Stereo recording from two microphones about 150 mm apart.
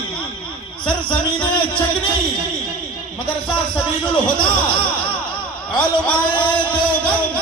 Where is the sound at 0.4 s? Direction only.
35° left (ahead or behind).